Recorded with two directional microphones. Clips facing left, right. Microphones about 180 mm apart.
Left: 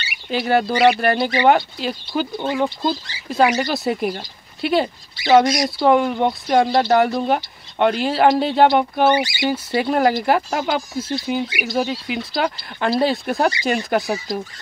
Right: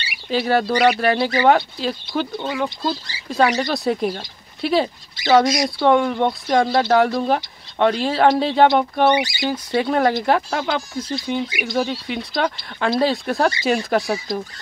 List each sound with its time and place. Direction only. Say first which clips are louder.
0.3 s speech: even; centre (ahead or behind)
2.5 s speech: left 3 dB; 20° left (ahead or behind)
3.5 s speech: even; 5° left (ahead or behind)